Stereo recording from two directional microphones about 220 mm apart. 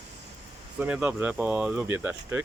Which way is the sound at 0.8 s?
5° right (ahead or behind).